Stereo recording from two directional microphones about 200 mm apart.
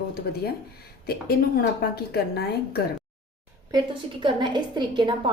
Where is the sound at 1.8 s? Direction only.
50° left (ahead or behind).